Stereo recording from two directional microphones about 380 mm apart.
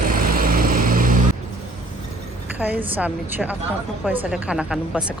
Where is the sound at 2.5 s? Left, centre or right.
Centre.